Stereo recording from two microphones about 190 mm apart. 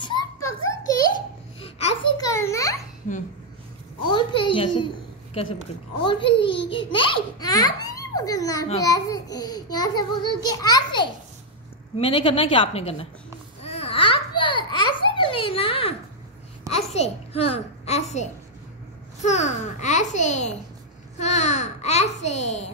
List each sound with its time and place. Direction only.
0.0 s children playing: 20° left (ahead or behind)
1.6 s babbling: 30° left (ahead or behind)
2.1 s a sound: 15° left (ahead or behind)
4.1 s a sound: 25° left (ahead or behind)
6.0 s a child's voice: 25° left (ahead or behind)
13.6 s babbling: 30° left (ahead or behind)
16.6 s a child's voice: 35° left (ahead or behind)